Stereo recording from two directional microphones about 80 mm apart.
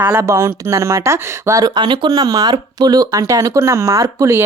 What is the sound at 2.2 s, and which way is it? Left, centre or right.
Speech, right.